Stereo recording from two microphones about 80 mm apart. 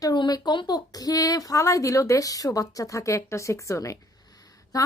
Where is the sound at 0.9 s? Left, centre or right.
Left.